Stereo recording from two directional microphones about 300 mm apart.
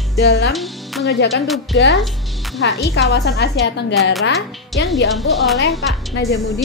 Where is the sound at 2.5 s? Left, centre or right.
Left.